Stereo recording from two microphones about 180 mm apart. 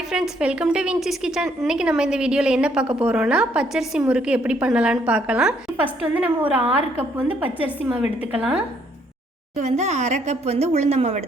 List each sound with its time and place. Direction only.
0.1 s a woman's voice: 5° right (ahead or behind)
9.6 s speech: 40° right (ahead or behind)